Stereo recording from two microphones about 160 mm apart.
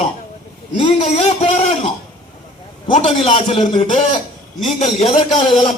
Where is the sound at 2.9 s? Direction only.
45° left (ahead or behind).